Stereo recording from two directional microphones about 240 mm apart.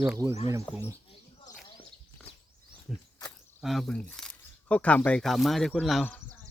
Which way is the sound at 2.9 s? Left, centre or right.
Centre.